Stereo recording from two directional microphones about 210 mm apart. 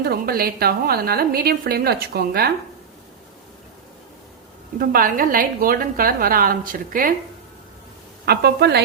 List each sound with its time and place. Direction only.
0.0 s a woman's voice: 45° right (ahead or behind)
4.8 s a woman's voice: 40° right (ahead or behind)
8.2 s a woman's voice: 50° right (ahead or behind)